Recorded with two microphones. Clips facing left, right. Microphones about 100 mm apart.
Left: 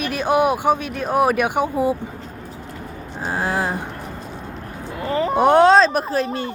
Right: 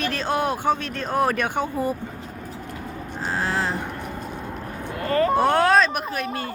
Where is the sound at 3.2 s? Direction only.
15° left (ahead or behind).